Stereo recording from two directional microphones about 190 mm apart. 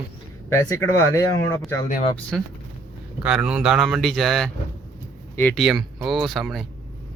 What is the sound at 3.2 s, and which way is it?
Speech, 5° right (ahead or behind).